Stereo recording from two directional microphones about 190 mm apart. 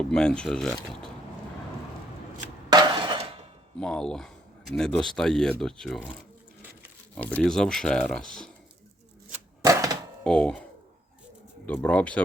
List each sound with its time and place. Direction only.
0.0 s speech: 5° left (ahead or behind)
2.6 s music: 25° right (ahead or behind)
3.8 s speech: 5° left (ahead or behind)
7.3 s speech: 5° left (ahead or behind)
9.6 s chopping: 20° right (ahead or behind)
10.2 s speech: 5° left (ahead or behind)
11.6 s speech: 5° left (ahead or behind)